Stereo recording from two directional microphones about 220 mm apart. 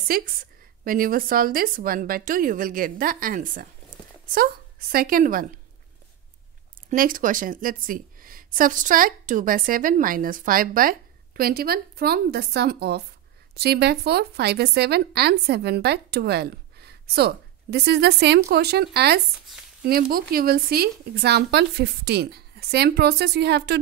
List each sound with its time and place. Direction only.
0.1 s a woman's voice: 45° right (ahead or behind)
6.9 s a woman's voice: 40° right (ahead or behind)